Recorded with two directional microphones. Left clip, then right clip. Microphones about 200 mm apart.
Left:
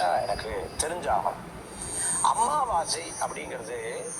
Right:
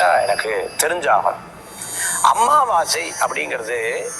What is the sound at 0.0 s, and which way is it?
Speech, 25° right (ahead or behind).